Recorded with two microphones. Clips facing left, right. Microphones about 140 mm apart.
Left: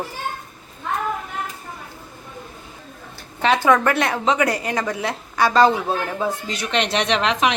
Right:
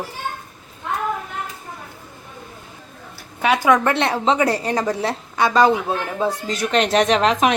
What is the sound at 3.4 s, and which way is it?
Speech, 10° right (ahead or behind).